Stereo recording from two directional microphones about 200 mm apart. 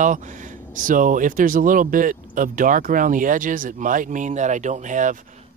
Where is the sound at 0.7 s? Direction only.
40° right (ahead or behind).